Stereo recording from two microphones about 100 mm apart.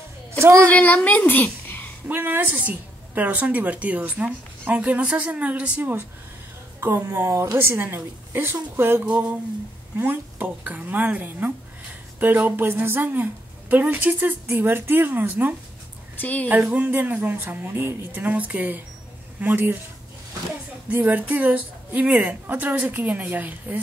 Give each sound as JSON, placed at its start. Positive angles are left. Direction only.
{"t": 0.4, "sound": "speech", "side_deg": -30}
{"t": 0.7, "sound": "a woman's voice", "side_deg": 15}
{"t": 2.0, "sound": "speech", "side_deg": -20}
{"t": 16.2, "sound": "speech", "side_deg": 15}
{"t": 16.4, "sound": "speech", "side_deg": -15}
{"t": 20.9, "sound": "speech", "side_deg": -15}